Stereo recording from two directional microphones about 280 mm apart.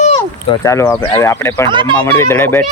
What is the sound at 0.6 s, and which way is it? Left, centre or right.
Speech, centre.